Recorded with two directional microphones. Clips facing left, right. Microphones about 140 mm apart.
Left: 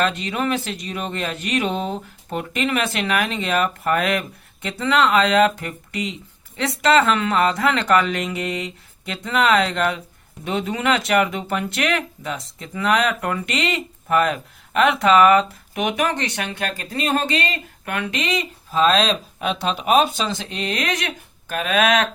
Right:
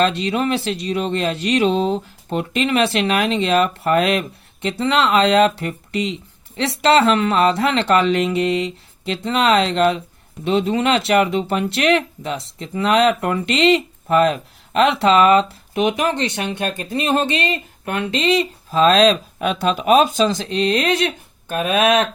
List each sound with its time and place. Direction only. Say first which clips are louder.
0.0 s speech: right 4 dB; 30° right (ahead or behind)